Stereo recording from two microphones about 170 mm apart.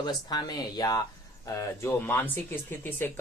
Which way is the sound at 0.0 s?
25° left (ahead or behind).